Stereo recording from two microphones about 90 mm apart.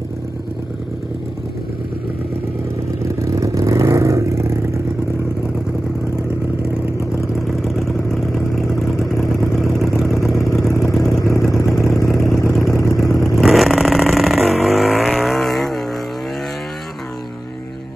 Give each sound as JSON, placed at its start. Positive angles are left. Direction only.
{"t": 3.2, "sound": "vehicle", "side_deg": -35}
{"t": 7.3, "sound": "vehicle", "side_deg": 0}
{"t": 11.1, "sound": "vehicle", "side_deg": 30}
{"t": 12.1, "sound": "vehicle", "side_deg": 0}
{"t": 12.7, "sound": "vehicle", "side_deg": 40}
{"t": 13.2, "sound": "vehicle", "side_deg": 0}